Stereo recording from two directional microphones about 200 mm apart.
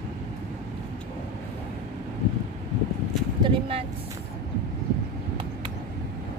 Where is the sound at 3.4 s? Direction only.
30° right (ahead or behind).